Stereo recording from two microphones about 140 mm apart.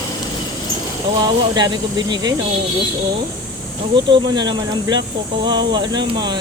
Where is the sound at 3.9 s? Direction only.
35° right (ahead or behind).